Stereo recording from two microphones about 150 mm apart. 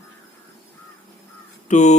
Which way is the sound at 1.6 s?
50° left (ahead or behind).